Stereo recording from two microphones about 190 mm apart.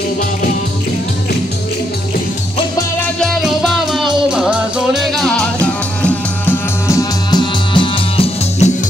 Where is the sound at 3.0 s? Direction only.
5° left (ahead or behind).